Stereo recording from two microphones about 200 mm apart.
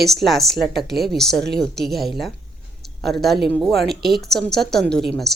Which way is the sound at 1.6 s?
Centre (ahead or behind).